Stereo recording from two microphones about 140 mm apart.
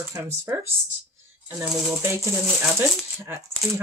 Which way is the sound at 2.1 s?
20° right (ahead or behind).